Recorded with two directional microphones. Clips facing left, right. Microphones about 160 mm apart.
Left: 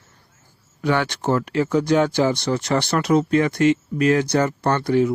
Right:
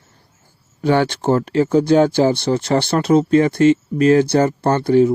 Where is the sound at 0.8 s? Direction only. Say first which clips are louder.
Right 5 dB; 30° right (ahead or behind).